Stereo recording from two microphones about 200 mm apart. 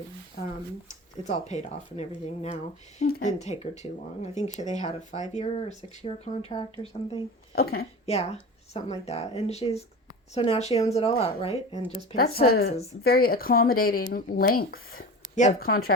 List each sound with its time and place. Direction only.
1.2 s speech: 35° left (ahead or behind)
7.5 s speech: 50° left (ahead or behind)
8.0 s speech: 30° left (ahead or behind)
12.1 s speech: 50° left (ahead or behind)
12.7 s speech: 30° left (ahead or behind)
13.0 s speech: 50° left (ahead or behind)